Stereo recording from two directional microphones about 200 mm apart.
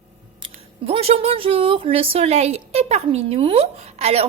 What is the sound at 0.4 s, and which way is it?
Speech, 30° right (ahead or behind).